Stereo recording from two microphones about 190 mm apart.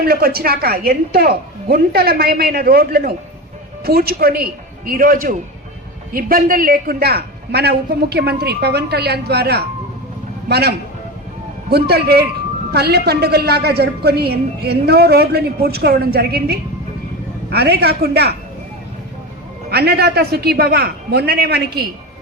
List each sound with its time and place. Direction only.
0.0 s a man's voice: 50° right (ahead or behind)
19.7 s a woman's voice: 55° right (ahead or behind)